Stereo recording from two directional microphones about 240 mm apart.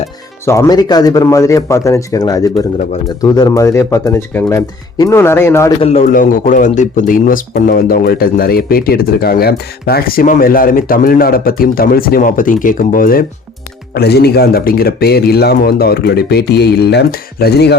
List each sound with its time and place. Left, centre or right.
0.4 s speech: centre
5.8 s a man's voice: left